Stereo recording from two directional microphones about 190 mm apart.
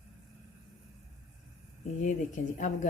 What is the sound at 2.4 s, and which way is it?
Speech, 40° left (ahead or behind).